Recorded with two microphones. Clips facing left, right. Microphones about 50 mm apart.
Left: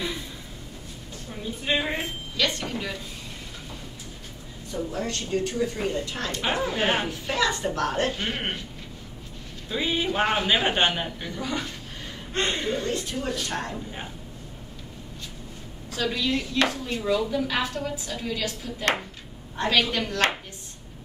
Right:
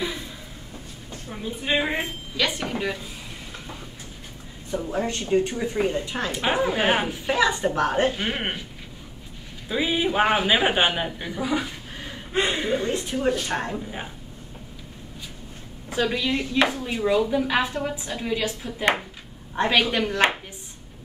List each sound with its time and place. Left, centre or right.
1.3 s a man's voice: centre
4.6 s a man's voice: right
9.7 s a man's voice: centre
15.9 s speech: centre